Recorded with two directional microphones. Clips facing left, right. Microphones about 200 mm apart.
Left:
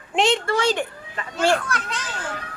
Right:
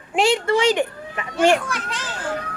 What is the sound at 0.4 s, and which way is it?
Children playing, 15° right (ahead or behind).